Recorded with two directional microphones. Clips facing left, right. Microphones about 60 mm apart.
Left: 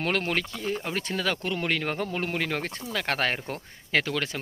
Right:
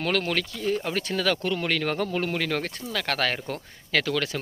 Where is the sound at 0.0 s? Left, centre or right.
Left.